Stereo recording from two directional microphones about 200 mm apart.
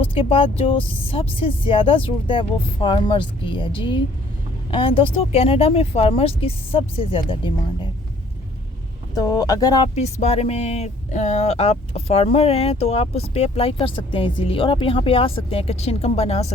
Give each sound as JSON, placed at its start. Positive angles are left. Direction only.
{"t": 0.1, "sound": "speech", "side_deg": 25}
{"t": 9.1, "sound": "speech", "side_deg": 20}
{"t": 9.9, "sound": "speech", "side_deg": 35}